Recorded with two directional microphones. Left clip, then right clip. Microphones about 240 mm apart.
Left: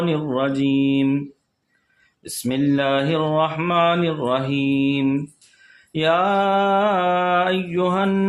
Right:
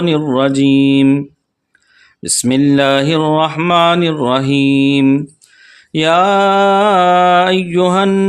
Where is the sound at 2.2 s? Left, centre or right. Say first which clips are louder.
Right 9 dB; right.